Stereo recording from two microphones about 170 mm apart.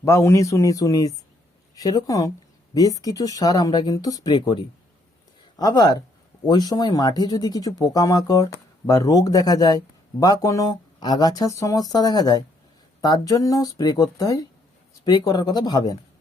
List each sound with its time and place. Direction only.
0.0 s speech: 15° left (ahead or behind)